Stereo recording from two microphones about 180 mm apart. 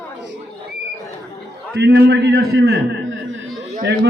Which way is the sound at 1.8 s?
75° right (ahead or behind).